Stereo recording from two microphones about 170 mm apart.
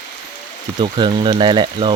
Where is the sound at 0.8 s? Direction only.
30° right (ahead or behind).